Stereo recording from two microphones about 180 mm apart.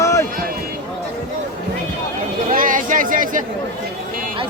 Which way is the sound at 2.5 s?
50° right (ahead or behind).